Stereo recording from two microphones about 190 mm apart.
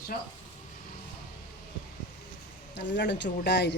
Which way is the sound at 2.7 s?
65° left (ahead or behind).